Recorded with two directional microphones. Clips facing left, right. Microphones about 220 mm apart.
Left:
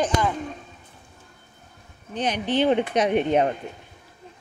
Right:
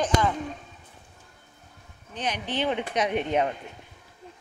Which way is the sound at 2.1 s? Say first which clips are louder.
Left 7 dB; 35° left (ahead or behind).